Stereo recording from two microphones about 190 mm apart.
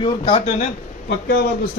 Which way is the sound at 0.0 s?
30° left (ahead or behind).